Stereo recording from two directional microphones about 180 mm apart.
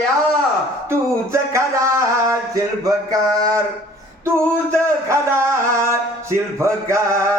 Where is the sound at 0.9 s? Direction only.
15° right (ahead or behind).